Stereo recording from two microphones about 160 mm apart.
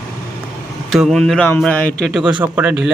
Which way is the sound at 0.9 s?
Centre (ahead or behind).